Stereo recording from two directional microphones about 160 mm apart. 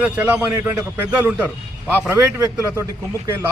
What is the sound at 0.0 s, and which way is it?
A man's voice, 10° right (ahead or behind).